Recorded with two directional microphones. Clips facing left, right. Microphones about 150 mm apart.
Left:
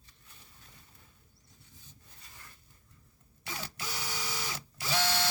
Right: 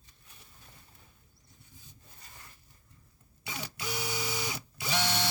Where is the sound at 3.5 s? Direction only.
15° right (ahead or behind).